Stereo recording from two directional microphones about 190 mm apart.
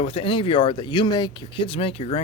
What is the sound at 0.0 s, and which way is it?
Speech, 25° left (ahead or behind).